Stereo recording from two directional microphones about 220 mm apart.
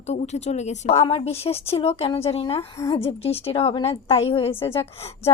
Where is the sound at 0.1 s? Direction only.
30° left (ahead or behind).